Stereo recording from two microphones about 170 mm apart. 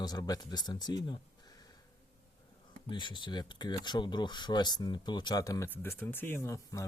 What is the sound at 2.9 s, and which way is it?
Speech, 30° left (ahead or behind).